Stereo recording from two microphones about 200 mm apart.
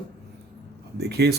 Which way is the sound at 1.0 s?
55° right (ahead or behind).